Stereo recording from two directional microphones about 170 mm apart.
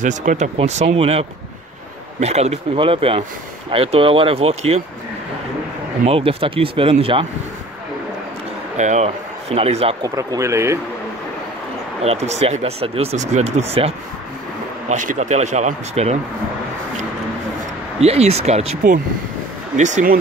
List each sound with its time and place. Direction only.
0.0 s speech: 45° right (ahead or behind)
6.0 s speech: 35° right (ahead or behind)
8.7 s speech: 45° right (ahead or behind)
10.0 s a man's voice: 20° right (ahead or behind)
12.0 s speech: 40° right (ahead or behind)
14.9 s speech: 45° right (ahead or behind)
18.0 s speech: 40° right (ahead or behind)